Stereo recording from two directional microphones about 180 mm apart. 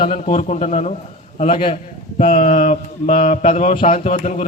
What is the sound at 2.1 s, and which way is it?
Mantra, 45° left (ahead or behind).